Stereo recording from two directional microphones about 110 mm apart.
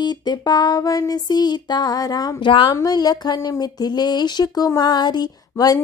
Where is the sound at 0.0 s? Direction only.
40° left (ahead or behind).